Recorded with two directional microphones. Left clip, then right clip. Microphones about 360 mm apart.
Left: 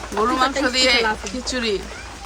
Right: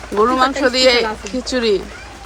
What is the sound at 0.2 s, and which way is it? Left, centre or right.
A woman's voice, centre.